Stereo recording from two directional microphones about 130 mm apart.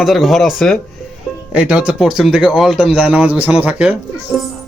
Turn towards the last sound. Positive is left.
turn(degrees=-10)  # may be behind; listen again after turning